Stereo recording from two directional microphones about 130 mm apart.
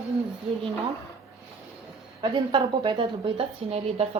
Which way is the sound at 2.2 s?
40° right (ahead or behind).